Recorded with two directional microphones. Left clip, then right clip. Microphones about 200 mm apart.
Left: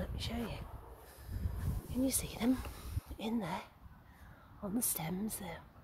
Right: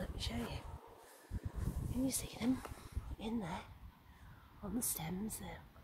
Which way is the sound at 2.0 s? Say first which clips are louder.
Left 4 dB; 45° left (ahead or behind).